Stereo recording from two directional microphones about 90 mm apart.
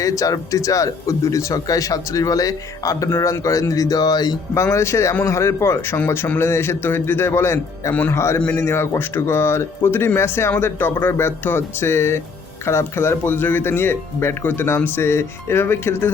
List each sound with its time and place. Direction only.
0.0 s speech: 40° left (ahead or behind)
4.5 s speech: 30° left (ahead or behind)